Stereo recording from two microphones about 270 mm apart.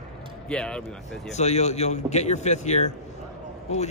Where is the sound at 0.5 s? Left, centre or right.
Centre.